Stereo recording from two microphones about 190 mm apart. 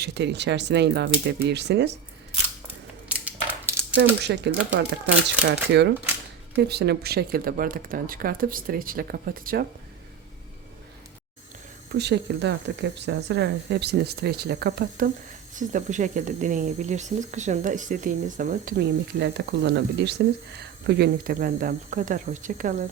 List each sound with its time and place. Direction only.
0.0 s speech: 65° right (ahead or behind)
3.1 s a sound: 10° right (ahead or behind)
4.2 s speech: 65° right (ahead or behind)
6.6 s speech: 60° right (ahead or behind)
11.9 s speech: 60° right (ahead or behind)
15.5 s speech: 40° right (ahead or behind)